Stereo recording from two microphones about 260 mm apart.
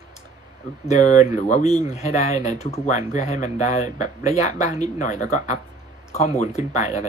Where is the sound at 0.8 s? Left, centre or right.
Left.